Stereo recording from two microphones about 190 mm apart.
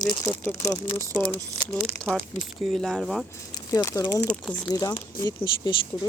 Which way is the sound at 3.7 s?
15° left (ahead or behind).